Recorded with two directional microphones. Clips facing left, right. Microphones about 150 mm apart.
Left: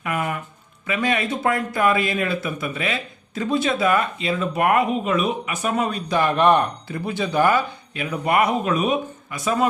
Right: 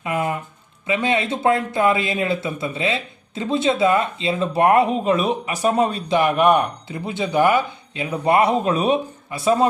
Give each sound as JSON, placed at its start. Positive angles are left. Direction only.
{"t": 0.0, "sound": "speech", "side_deg": -25}
{"t": 6.1, "sound": "speech", "side_deg": -10}
{"t": 6.9, "sound": "speech", "side_deg": -20}